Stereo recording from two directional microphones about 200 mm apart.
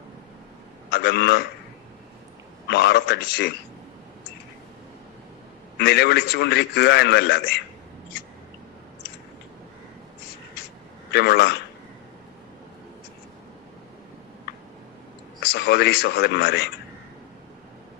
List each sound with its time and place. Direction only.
0.9 s a man's voice: 55° left (ahead or behind)
2.6 s a man's voice: 55° left (ahead or behind)
5.8 s a man's voice: 55° left (ahead or behind)
11.1 s a man's voice: 55° left (ahead or behind)
15.4 s speech: 55° left (ahead or behind)